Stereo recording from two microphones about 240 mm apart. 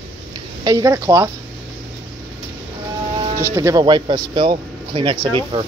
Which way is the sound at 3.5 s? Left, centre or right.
Centre.